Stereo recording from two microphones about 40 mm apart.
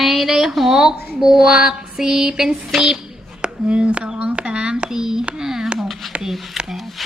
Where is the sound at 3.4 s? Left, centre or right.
Right.